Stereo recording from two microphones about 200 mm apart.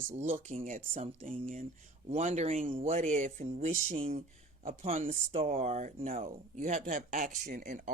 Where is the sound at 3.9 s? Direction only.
30° right (ahead or behind).